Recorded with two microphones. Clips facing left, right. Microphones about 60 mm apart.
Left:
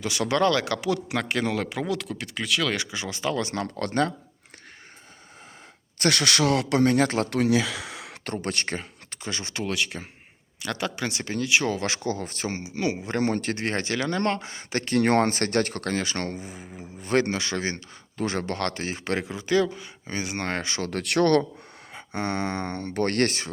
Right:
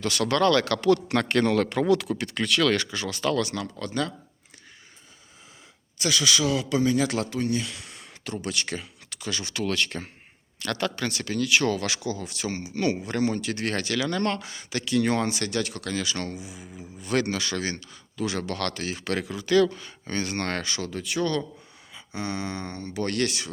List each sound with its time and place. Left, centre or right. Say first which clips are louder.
0.0 s a man's voice: even; centre
3.8 s speech: left 5 dB; left
6.0 s speech: left 2 dB; left
7.3 s speech: left 5 dB; left
8.2 s speech: left 1 dB; left
9.6 s a man's voice: right 1 dB; centre
11.9 s speech: left 2 dB; left; by 13.1 s centre
13.1 s speech: left 1 dB; left
13.6 s speech: even; left
20.8 s speech: left 7 dB; left
21.9 s speech: left 3 dB; left